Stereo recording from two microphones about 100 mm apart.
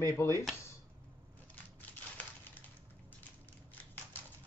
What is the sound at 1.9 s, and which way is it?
Crumpling, 15° left (ahead or behind).